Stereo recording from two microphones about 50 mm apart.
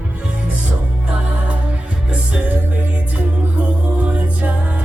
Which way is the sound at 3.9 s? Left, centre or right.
Right.